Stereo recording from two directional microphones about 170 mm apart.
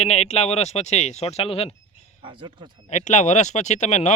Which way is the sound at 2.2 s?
30° right (ahead or behind).